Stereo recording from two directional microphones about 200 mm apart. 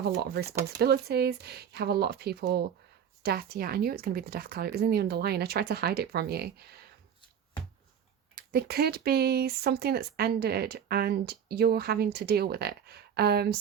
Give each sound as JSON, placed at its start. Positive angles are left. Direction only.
{"t": 0.0, "sound": "speech", "side_deg": -50}
{"t": 8.4, "sound": "speech", "side_deg": -50}